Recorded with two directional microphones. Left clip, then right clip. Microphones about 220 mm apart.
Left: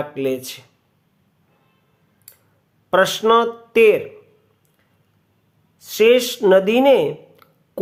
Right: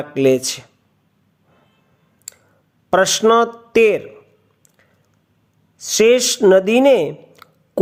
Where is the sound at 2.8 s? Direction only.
25° right (ahead or behind).